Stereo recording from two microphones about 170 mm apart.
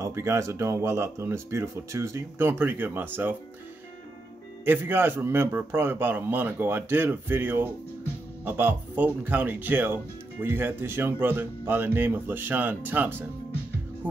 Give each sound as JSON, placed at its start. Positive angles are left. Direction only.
{"t": 0.0, "sound": "speech", "side_deg": -15}
{"t": 4.6, "sound": "speech", "side_deg": -10}